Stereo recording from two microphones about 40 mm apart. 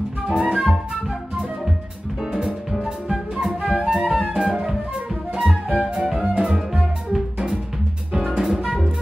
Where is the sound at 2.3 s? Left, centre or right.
Centre.